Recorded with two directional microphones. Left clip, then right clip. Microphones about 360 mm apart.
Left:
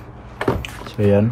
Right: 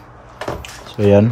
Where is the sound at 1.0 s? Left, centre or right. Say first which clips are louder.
Right 4 dB; right.